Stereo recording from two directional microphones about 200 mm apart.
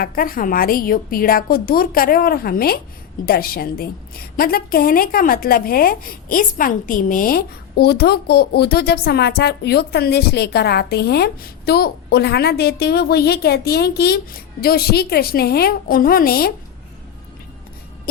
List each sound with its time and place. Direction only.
0.0 s a woman's voice: 45° left (ahead or behind)